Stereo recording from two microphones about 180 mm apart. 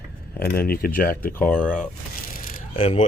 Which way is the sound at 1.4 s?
5° left (ahead or behind).